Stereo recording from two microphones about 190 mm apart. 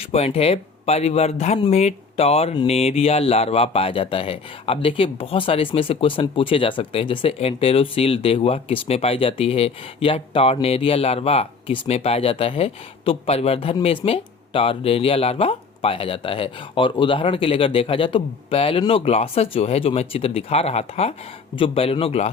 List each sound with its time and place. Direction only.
0.0 s speech: 30° left (ahead or behind)